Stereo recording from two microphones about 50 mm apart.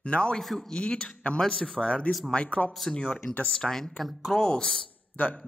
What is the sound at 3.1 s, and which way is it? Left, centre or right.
Speech, left.